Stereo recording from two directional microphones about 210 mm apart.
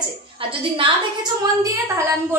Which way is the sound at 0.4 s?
25° right (ahead or behind).